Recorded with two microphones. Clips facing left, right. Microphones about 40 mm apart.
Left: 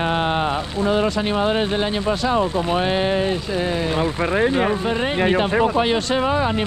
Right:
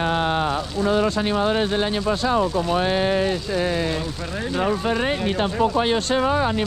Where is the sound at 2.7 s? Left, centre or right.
Left.